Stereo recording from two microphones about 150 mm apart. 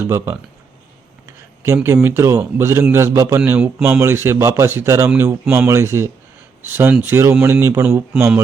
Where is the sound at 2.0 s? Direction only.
20° right (ahead or behind).